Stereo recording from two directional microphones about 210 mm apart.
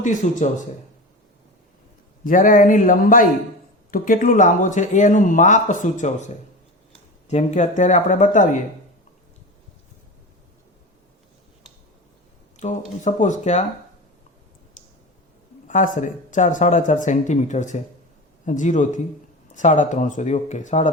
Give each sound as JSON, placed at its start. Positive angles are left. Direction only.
{"t": 0.0, "sound": "speech", "side_deg": 35}
{"t": 2.2, "sound": "speech", "side_deg": 40}
{"t": 12.5, "sound": "speech", "side_deg": 35}
{"t": 15.6, "sound": "speech", "side_deg": 35}